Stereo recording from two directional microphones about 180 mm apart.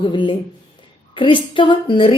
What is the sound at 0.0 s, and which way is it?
A woman's voice, 30° left (ahead or behind).